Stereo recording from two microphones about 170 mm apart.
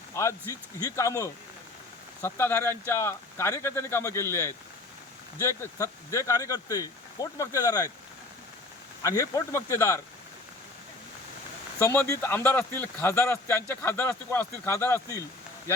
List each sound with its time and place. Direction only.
0.1 s speech: 15° left (ahead or behind)
9.0 s speech: 20° left (ahead or behind)
11.8 s speech: 15° left (ahead or behind)